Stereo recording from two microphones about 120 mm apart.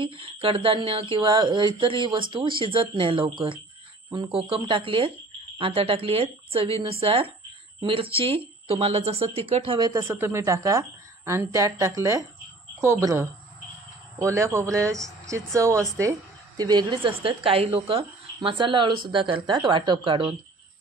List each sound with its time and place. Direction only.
0.0 s speech: 50° right (ahead or behind)
9.8 s speech: 35° right (ahead or behind)
10.0 s a woman's voice: 20° right (ahead or behind)
16.0 s a sound: 25° right (ahead or behind)
16.6 s speech: 35° right (ahead or behind)